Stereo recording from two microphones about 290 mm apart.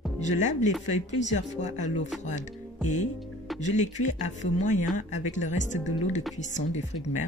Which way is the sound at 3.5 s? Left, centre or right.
Left.